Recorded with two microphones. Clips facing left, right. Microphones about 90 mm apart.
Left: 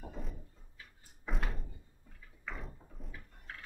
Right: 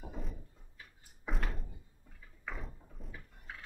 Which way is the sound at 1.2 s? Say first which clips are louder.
Even; centre (ahead or behind).